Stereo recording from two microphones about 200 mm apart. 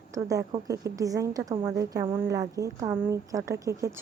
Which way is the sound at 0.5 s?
20° right (ahead or behind).